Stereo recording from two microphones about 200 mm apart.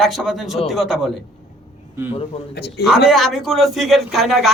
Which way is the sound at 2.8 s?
Centre (ahead or behind).